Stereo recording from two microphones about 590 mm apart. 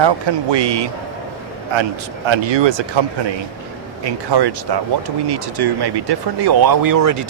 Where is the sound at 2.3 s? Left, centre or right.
Right.